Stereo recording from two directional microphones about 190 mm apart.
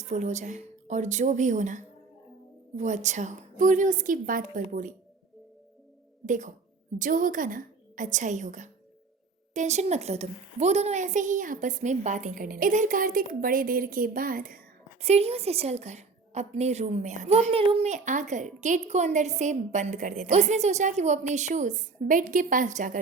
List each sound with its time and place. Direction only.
0.0 s a woman's voice: 40° right (ahead or behind)
6.2 s a woman's voice: 40° right (ahead or behind)
15.0 s a woman's voice: 35° right (ahead or behind)